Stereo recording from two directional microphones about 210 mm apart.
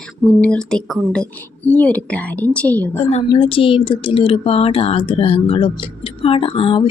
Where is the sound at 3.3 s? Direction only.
20° left (ahead or behind).